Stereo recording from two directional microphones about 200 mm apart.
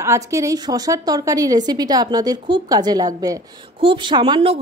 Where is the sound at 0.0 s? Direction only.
15° right (ahead or behind).